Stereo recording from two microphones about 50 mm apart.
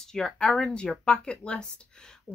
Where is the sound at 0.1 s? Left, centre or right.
Centre.